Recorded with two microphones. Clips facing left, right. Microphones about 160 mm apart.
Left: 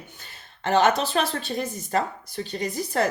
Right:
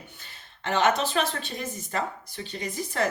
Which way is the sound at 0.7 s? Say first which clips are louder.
Left 3 dB; 35° left (ahead or behind).